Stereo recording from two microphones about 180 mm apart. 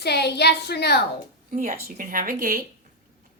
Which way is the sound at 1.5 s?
50° right (ahead or behind).